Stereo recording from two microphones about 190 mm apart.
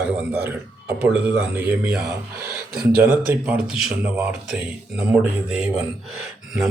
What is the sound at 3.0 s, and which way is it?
Speech, 10° right (ahead or behind).